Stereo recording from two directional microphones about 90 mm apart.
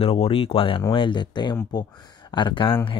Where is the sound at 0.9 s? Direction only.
65° left (ahead or behind).